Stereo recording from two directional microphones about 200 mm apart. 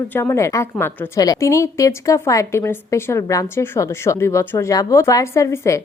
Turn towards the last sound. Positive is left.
turn(degrees=15)  # may be behind; listen again after turning